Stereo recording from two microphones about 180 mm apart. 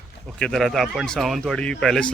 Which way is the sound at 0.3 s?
Centre (ahead or behind).